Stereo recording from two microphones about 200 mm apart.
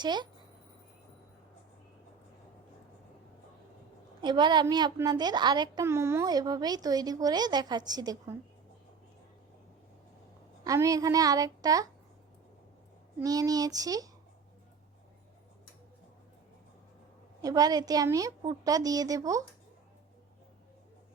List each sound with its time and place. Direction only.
0.0 s a woman's voice: 20° right (ahead or behind)
4.2 s a woman's voice: 20° right (ahead or behind)
10.6 s a woman's voice: 15° right (ahead or behind)
13.1 s a woman's voice: 20° right (ahead or behind)
17.4 s a woman's voice: 20° right (ahead or behind)